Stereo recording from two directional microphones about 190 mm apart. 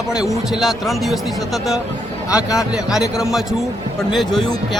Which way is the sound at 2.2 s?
15° left (ahead or behind).